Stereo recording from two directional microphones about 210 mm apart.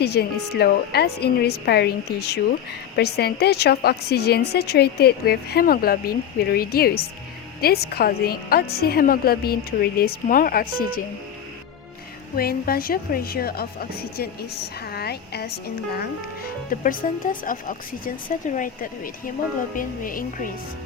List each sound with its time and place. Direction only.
0.0 s a woman's voice: 50° left (ahead or behind)
12.4 s a woman's voice: 45° left (ahead or behind)
14.8 s speech: 50° left (ahead or behind)